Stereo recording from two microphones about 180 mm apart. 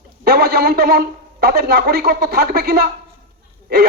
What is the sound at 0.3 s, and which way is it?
A man's voice, 60° right (ahead or behind).